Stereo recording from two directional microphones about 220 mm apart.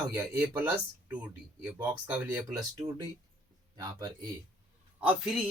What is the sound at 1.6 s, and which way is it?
Speech, 5° right (ahead or behind).